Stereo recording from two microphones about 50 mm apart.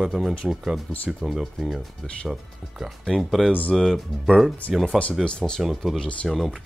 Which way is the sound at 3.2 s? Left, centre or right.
Centre.